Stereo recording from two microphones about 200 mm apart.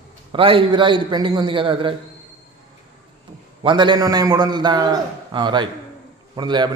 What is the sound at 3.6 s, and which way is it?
A man's voice, 25° right (ahead or behind).